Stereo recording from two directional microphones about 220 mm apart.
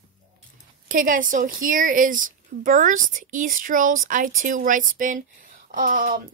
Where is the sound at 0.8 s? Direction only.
40° right (ahead or behind).